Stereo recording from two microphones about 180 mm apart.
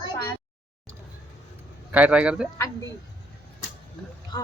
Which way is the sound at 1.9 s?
5° right (ahead or behind).